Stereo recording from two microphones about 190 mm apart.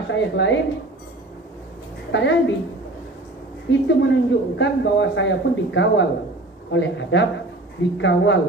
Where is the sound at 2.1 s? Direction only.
70° left (ahead or behind).